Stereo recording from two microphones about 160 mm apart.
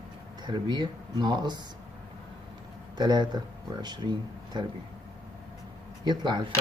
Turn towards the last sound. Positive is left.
turn(degrees=-30)  # may be behind; listen again after turning